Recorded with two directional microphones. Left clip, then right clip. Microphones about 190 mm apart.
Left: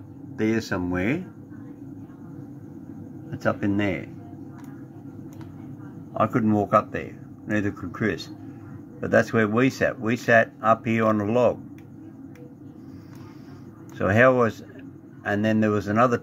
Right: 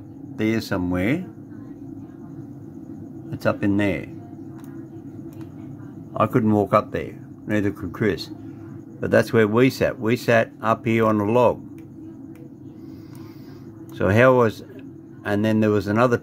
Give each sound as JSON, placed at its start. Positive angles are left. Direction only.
{"t": 0.4, "sound": "speech", "side_deg": -20}
{"t": 3.3, "sound": "a man's voice", "side_deg": -20}
{"t": 6.1, "sound": "speech", "side_deg": -20}
{"t": 13.9, "sound": "speech", "side_deg": -20}